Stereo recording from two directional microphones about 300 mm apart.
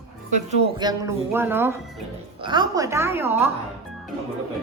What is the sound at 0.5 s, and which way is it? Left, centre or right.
Speech, centre.